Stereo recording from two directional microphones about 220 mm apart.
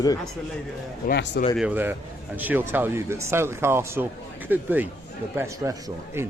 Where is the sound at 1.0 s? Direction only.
50° left (ahead or behind).